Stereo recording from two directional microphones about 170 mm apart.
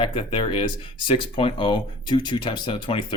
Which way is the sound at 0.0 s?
30° left (ahead or behind).